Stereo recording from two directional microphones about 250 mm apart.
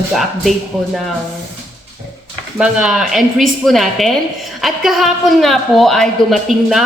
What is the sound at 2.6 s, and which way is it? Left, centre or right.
A woman's voice, centre.